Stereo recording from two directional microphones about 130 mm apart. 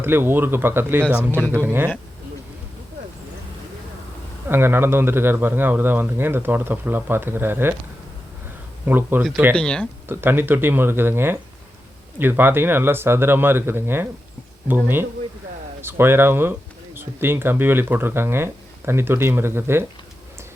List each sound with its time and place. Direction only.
0.0 s speech: 15° right (ahead or behind)
1.4 s speech: 10° left (ahead or behind)
1.6 s speech: 15° right (ahead or behind)
4.4 s speech: 15° right (ahead or behind)
8.9 s speech: 15° right (ahead or behind)
9.6 s speech: 5° left (ahead or behind)
10.1 s speech: 15° right (ahead or behind)